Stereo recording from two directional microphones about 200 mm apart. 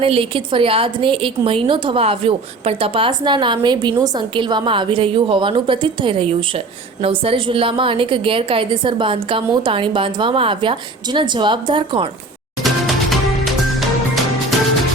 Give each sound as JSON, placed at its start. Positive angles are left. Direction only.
{"t": 0.0, "sound": "a woman's voice", "side_deg": -25}
{"t": 12.6, "sound": "music", "side_deg": 0}